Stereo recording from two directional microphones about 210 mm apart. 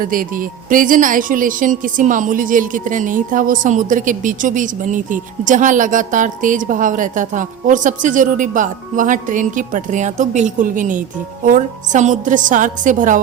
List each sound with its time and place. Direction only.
0.0 s speech: 40° right (ahead or behind)